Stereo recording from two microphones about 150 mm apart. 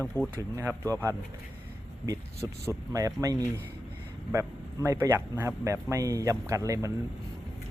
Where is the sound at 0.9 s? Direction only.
20° right (ahead or behind).